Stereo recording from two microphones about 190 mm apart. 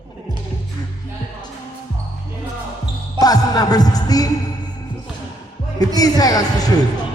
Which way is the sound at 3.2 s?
20° left (ahead or behind).